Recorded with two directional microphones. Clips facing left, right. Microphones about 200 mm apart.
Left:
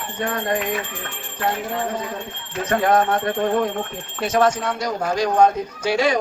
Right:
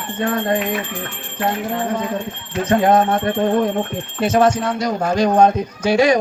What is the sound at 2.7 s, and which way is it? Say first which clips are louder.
Speech: right 3 dB; 25° right (ahead or behind).